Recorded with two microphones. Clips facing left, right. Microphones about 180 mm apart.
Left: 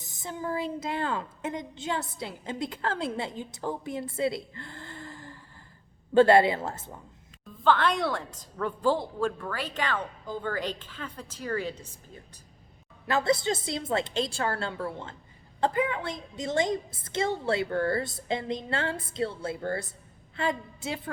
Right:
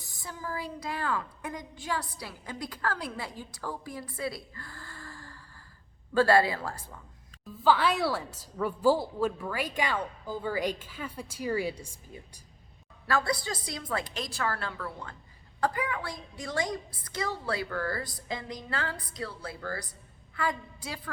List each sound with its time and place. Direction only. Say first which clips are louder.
0.0 s a woman's voice: left 5 dB; 20° left (ahead or behind)
7.6 s a woman's voice: left 1 dB; 5° right (ahead or behind)
13.1 s a woman's voice: left 4 dB; 20° left (ahead or behind)